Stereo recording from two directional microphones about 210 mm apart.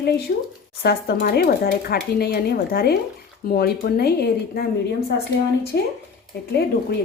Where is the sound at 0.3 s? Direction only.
45° left (ahead or behind).